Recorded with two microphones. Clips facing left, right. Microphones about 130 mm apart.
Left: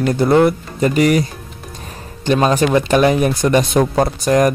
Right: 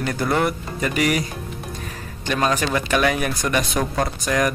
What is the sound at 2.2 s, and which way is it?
Speech, 25° left (ahead or behind).